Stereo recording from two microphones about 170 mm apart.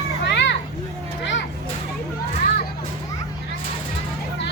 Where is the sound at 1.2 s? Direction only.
90° left.